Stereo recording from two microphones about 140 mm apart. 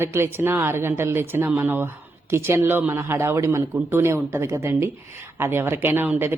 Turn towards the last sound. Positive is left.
turn(degrees=-15)  # may be behind; listen again after turning